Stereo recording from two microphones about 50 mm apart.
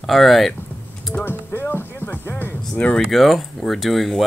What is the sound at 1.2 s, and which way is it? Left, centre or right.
Music, left.